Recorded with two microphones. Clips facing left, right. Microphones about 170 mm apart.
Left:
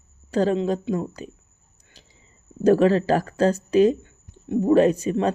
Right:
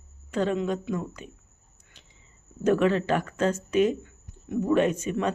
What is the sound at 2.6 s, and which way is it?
Speech, 35° left (ahead or behind).